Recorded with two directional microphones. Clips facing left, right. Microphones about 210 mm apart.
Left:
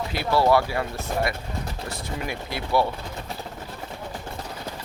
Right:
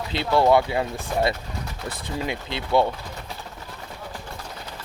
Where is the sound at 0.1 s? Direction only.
20° right (ahead or behind).